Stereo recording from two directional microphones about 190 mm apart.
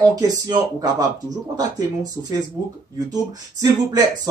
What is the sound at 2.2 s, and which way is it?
Speech, 15° right (ahead or behind).